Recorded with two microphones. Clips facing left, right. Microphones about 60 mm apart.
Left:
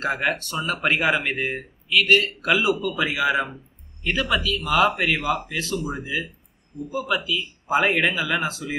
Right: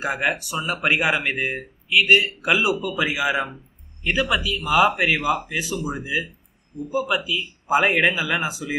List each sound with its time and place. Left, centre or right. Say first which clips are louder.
0.0 s speech: even; centre